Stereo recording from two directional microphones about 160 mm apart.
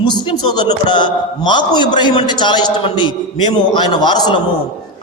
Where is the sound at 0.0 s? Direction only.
25° left (ahead or behind).